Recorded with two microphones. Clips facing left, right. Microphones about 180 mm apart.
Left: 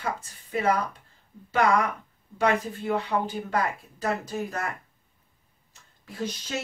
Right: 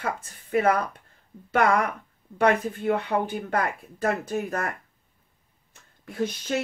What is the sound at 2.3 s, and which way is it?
Speech, 55° right (ahead or behind).